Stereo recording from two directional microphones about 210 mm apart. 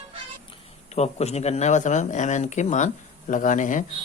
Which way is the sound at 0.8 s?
30° left (ahead or behind).